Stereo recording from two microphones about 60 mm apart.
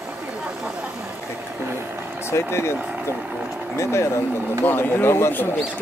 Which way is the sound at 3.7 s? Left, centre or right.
Left.